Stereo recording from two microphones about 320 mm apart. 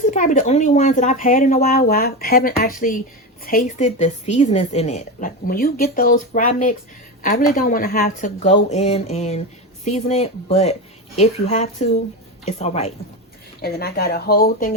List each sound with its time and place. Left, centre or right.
0.0 s a woman's voice: left